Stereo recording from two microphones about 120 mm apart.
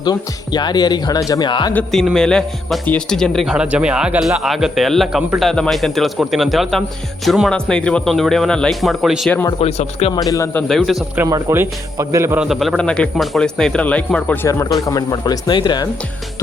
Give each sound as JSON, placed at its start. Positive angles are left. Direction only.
{"t": 0.0, "sound": "speech", "side_deg": 35}
{"t": 2.1, "sound": "speech", "side_deg": 5}
{"t": 3.5, "sound": "speech", "side_deg": -10}
{"t": 9.6, "sound": "speech", "side_deg": 60}
{"t": 10.1, "sound": "speech", "side_deg": 30}
{"t": 10.7, "sound": "speech", "side_deg": 0}
{"t": 11.3, "sound": "a man's voice", "side_deg": -30}
{"t": 12.4, "sound": "speech", "side_deg": 0}
{"t": 14.4, "sound": "speech", "side_deg": 25}